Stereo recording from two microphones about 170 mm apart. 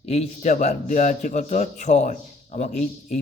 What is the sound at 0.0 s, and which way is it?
A man's voice, 40° left (ahead or behind).